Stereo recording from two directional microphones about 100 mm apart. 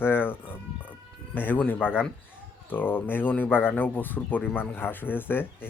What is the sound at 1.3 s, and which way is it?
Speech, 15° left (ahead or behind).